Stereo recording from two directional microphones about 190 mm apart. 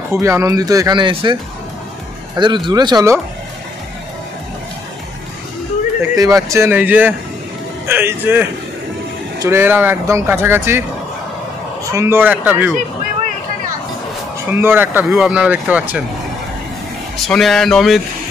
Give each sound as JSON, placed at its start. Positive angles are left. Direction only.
{"t": 0.1, "sound": "speech", "side_deg": -15}
{"t": 6.1, "sound": "speech", "side_deg": -20}
{"t": 11.9, "sound": "speech", "side_deg": -15}
{"t": 14.5, "sound": "speech", "side_deg": -10}
{"t": 17.3, "sound": "speech", "side_deg": 0}